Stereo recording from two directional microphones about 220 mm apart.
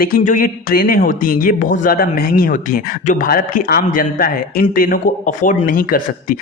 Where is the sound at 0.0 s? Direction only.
40° left (ahead or behind).